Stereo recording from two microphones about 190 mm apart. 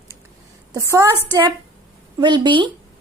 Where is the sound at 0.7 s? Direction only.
15° right (ahead or behind).